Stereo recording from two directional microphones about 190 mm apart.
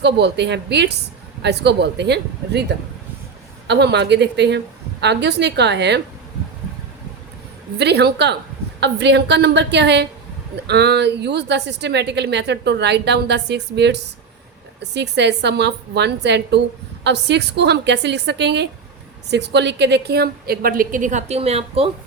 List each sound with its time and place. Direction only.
0.0 s a woman's voice: 65° right (ahead or behind)
7.8 s a woman's voice: 60° right (ahead or behind); by 21.8 s 35° right (ahead or behind)